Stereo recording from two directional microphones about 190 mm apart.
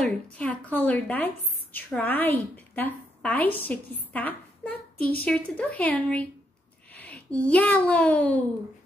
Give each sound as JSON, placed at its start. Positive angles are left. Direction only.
{"t": 0.0, "sound": "a woman's voice", "side_deg": 5}